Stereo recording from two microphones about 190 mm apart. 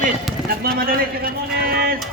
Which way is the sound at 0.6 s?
50° right (ahead or behind).